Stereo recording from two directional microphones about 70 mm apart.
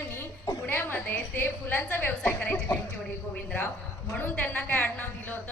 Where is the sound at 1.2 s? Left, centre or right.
Left.